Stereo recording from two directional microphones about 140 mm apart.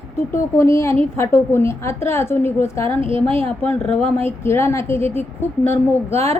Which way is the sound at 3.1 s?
45° right (ahead or behind).